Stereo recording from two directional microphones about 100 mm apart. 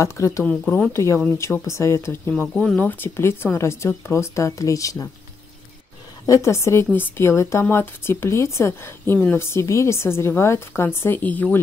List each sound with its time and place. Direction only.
0.0 s a woman's voice: 30° left (ahead or behind)
2.3 s speech: 10° left (ahead or behind)
2.8 s a woman's voice: 25° left (ahead or behind)
6.2 s a woman's voice: 30° left (ahead or behind)